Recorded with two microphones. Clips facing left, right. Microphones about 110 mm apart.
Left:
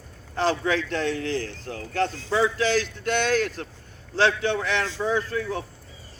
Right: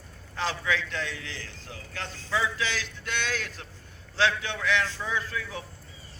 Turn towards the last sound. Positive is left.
turn(degrees=40)  # may be behind; listen again after turning